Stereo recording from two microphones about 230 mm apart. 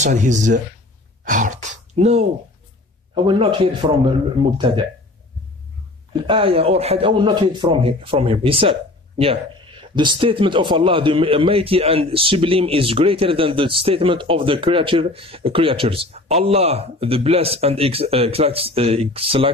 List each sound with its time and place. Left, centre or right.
0.0 s speech: right
3.3 s a man's voice: right
6.2 s a man's voice: right